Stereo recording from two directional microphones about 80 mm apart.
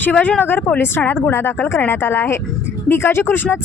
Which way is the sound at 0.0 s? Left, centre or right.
Centre.